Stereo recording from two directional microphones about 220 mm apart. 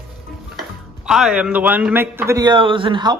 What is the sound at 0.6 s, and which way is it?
Speech, centre (ahead or behind).